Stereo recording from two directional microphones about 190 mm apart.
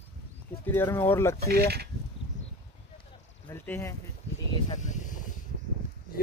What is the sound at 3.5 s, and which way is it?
Speech, 10° left (ahead or behind).